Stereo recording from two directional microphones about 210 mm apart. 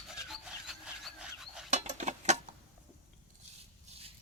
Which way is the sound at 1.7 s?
35° right (ahead or behind).